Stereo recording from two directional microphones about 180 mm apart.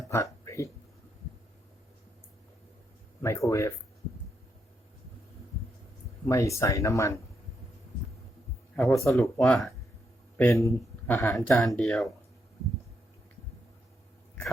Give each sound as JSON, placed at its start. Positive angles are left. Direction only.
{"t": 0.1, "sound": "a sound", "side_deg": 15}
{"t": 3.2, "sound": "speech", "side_deg": 15}
{"t": 6.2, "sound": "speech", "side_deg": 15}
{"t": 8.7, "sound": "speech", "side_deg": 10}
{"t": 11.6, "sound": "speech", "side_deg": 0}